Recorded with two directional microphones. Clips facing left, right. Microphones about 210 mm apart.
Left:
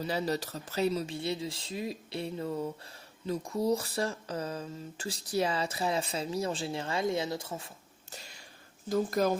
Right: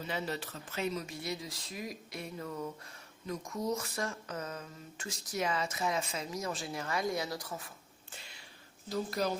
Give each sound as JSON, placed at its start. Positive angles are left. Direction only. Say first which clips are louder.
{"t": 0.0, "sound": "speech", "louder": "left 6 dB", "side_deg": 35}
{"t": 8.1, "sound": "a sound", "louder": "left 4 dB", "side_deg": 40}
{"t": 8.9, "sound": "speech", "louder": "left 6 dB", "side_deg": 50}